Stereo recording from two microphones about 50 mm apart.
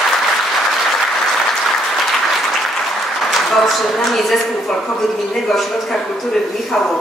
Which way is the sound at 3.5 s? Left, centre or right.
Centre.